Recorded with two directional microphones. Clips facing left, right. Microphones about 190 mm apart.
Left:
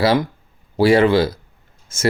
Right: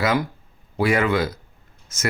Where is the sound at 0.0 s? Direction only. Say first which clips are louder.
Left 5 dB; 30° left (ahead or behind).